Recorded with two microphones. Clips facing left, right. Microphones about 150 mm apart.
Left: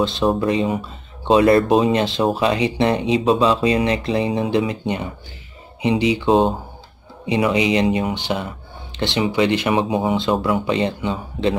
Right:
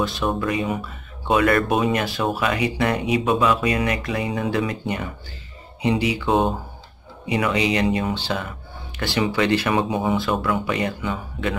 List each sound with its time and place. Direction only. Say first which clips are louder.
0.0 s speech: left 5 dB; 25° left (ahead or behind)